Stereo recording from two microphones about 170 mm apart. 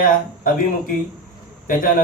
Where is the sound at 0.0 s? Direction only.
55° left (ahead or behind).